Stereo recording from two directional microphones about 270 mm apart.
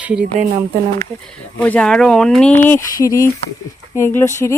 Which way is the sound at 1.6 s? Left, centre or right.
Centre.